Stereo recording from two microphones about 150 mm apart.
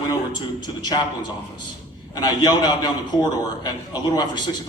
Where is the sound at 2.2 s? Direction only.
25° left (ahead or behind).